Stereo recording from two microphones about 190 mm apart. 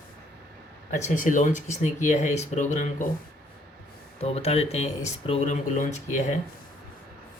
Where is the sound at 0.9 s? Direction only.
40° left (ahead or behind).